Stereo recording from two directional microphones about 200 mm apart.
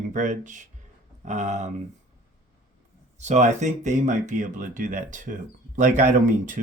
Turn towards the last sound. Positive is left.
turn(degrees=-40)  # may be behind; listen again after turning